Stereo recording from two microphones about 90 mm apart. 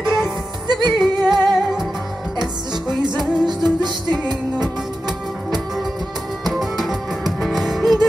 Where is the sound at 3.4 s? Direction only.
55° right (ahead or behind).